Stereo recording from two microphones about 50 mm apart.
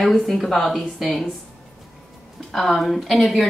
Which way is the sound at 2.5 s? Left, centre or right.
Centre.